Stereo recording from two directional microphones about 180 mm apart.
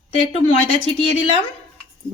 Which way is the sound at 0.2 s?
30° left (ahead or behind).